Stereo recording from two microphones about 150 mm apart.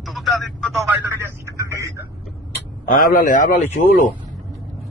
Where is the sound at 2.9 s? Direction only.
75° left (ahead or behind).